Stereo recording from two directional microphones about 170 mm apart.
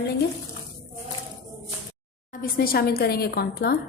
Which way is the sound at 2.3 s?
60° left (ahead or behind).